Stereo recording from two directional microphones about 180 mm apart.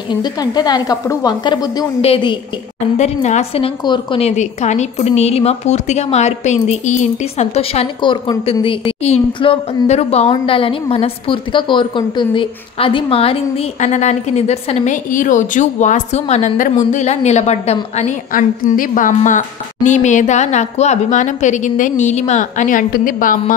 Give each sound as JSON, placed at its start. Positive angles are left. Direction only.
{"t": 0.1, "sound": "a woman's voice", "side_deg": 25}